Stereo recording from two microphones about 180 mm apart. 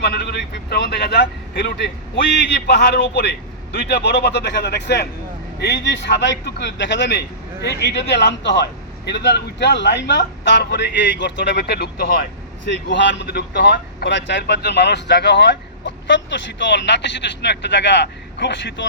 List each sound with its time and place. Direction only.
0.0 s speech: 65° left (ahead or behind)
12.6 s speech: 80° left